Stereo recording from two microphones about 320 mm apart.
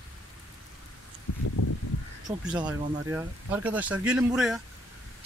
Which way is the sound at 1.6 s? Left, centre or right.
Left.